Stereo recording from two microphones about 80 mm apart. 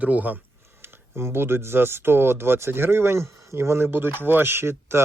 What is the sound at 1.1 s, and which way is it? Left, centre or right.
Speech, right.